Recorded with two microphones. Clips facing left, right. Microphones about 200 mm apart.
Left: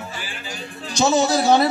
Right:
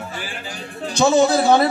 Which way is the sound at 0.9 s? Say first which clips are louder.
Right 3 dB; 55° right (ahead or behind).